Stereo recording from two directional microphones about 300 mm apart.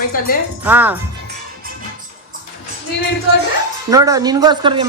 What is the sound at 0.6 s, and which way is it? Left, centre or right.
Speech, centre.